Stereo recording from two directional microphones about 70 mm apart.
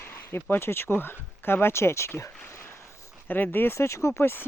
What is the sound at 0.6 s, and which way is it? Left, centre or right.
Speech, left.